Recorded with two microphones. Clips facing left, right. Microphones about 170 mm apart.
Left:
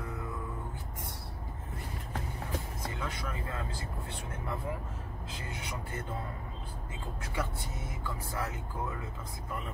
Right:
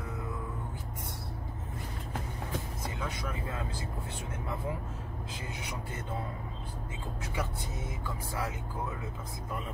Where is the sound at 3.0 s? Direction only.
15° right (ahead or behind).